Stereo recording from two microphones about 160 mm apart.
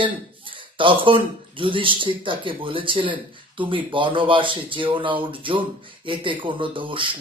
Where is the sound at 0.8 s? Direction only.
30° right (ahead or behind).